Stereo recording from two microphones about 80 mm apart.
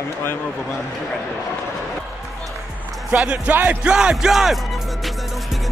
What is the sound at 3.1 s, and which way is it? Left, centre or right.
A man's voice, centre.